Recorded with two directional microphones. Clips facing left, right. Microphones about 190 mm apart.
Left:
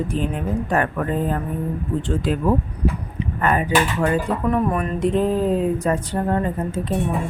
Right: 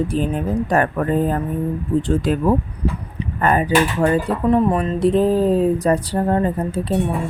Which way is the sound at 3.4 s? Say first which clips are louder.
Right 3 dB; 35° right (ahead or behind).